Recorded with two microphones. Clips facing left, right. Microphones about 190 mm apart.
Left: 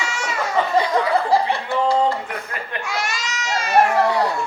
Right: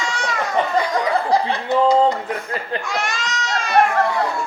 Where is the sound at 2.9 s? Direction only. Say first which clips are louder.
Right 2 dB; 10° left (ahead or behind).